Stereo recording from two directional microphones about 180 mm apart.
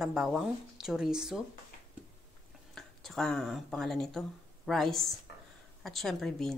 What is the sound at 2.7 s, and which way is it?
A woman's voice, centre (ahead or behind).